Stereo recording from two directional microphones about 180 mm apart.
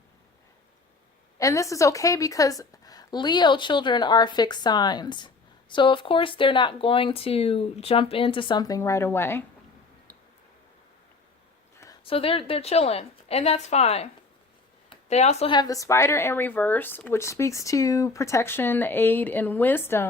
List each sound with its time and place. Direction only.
1.4 s a woman's voice: 15° left (ahead or behind)
12.0 s a woman's voice: 30° left (ahead or behind); by 20.1 s 10° left (ahead or behind)